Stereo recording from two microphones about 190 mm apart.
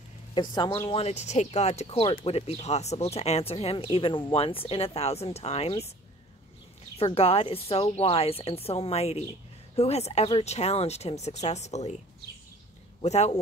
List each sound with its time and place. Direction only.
0.3 s a woman's voice: 25° left (ahead or behind)
1.0 s speech: 35° left (ahead or behind)
7.0 s speech: 30° left (ahead or behind)
13.0 s speech: 35° left (ahead or behind)